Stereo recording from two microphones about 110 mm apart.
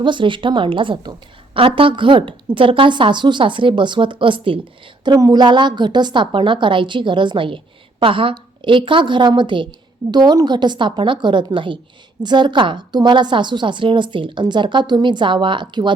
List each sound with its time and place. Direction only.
0.0 s a woman's voice: 45° right (ahead or behind)
5.0 s a woman's voice: 35° right (ahead or behind)